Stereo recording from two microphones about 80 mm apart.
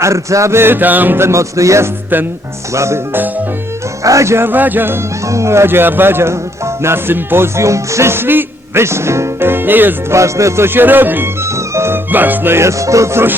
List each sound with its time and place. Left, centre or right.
0.0 s speech: right
4.0 s speech: right
5.3 s speech: right
10.2 s speech: right
10.8 s speech: right
11.7 s music: right
12.1 s speech: right